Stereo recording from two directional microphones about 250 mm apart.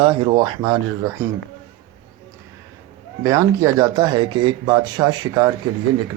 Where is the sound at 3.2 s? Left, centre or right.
Centre.